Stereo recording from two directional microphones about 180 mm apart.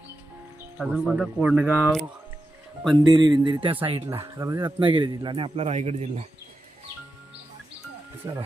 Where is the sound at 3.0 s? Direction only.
25° right (ahead or behind).